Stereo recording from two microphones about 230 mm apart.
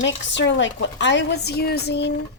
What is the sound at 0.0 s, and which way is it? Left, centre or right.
A woman's voice, left.